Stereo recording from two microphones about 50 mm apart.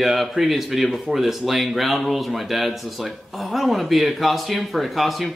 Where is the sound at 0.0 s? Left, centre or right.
Centre.